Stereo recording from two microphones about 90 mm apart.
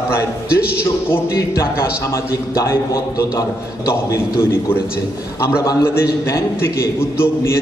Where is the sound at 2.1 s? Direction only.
30° left (ahead or behind).